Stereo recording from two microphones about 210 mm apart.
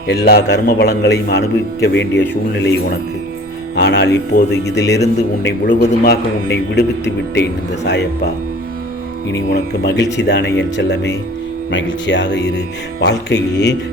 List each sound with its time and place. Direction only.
0.1 s a man's voice: 50° left (ahead or behind)
9.3 s a man's voice: 55° left (ahead or behind)